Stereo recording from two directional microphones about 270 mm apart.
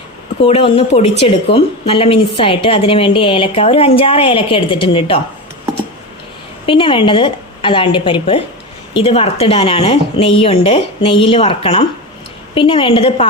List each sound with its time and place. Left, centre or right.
0.4 s a woman's voice: left
6.7 s a woman's voice: centre